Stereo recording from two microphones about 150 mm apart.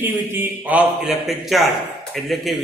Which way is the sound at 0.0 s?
15° right (ahead or behind).